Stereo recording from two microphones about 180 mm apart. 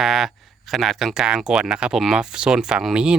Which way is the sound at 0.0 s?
Centre (ahead or behind).